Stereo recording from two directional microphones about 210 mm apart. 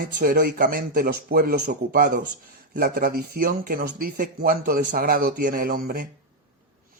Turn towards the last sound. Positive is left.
turn(degrees=-45)  # may be behind; listen again after turning